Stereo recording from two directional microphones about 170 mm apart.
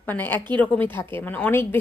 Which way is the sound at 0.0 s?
10° left (ahead or behind).